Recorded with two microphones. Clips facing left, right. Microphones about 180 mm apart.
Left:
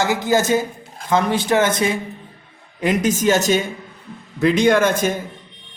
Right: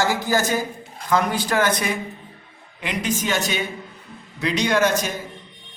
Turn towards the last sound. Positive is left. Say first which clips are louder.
# left 4 dB
turn(degrees=50)  # may be behind; listen again after turning